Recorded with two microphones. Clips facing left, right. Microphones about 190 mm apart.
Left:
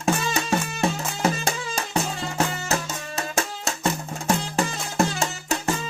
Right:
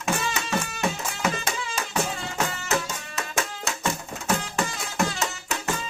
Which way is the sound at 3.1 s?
30° left (ahead or behind).